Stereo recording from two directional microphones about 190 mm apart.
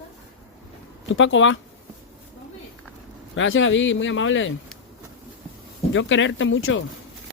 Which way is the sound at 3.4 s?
90° left.